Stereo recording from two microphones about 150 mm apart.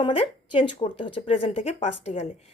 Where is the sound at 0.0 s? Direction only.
35° left (ahead or behind).